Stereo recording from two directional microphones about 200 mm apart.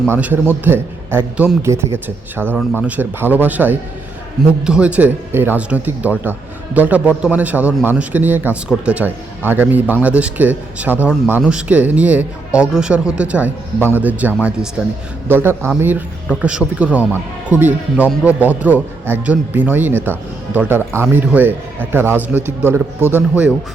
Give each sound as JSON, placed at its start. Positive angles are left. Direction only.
{"t": 0.1, "sound": "a man's voice", "side_deg": -10}